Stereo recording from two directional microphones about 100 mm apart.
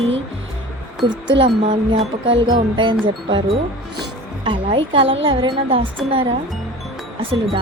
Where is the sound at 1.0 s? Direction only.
50° right (ahead or behind).